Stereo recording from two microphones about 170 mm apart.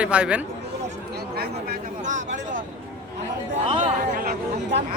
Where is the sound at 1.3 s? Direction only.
65° right (ahead or behind).